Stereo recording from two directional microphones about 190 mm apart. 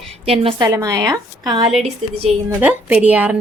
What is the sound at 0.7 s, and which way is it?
Speech, 20° right (ahead or behind).